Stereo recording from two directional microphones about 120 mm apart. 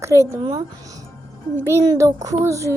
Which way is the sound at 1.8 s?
30° right (ahead or behind).